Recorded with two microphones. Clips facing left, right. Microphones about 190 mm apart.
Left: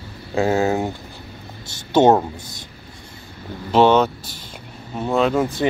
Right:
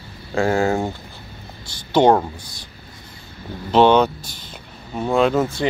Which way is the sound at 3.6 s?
5° left (ahead or behind).